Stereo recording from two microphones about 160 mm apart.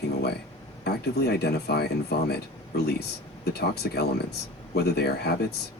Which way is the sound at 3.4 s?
85° left.